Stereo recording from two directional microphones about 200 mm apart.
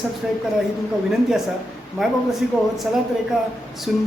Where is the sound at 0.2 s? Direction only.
Centre (ahead or behind).